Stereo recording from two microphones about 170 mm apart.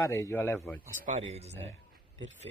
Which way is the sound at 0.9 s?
45° right (ahead or behind).